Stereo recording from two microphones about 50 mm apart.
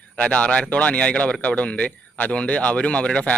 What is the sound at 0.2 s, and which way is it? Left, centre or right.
Speech, left.